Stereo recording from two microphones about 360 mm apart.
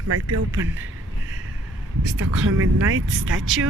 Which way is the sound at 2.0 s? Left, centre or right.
Right.